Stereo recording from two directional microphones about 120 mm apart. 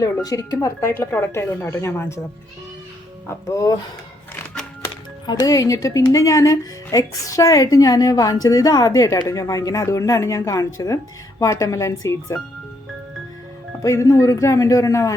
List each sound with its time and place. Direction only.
0.0 s speech: 30° left (ahead or behind)
3.2 s speech: 25° left (ahead or behind)
5.2 s speech: 35° left (ahead or behind)
13.8 s speech: 25° left (ahead or behind)